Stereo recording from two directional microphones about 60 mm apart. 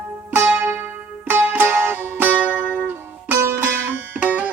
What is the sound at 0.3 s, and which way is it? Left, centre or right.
Music, right.